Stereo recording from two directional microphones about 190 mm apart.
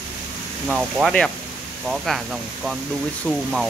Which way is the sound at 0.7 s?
Centre (ahead or behind).